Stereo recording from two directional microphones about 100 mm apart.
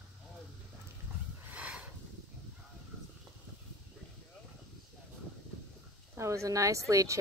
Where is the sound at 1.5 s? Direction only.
10° right (ahead or behind).